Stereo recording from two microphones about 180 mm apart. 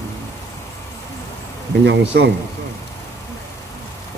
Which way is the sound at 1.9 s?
75° right (ahead or behind).